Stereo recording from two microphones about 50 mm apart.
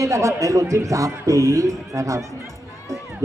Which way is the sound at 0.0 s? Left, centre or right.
Right.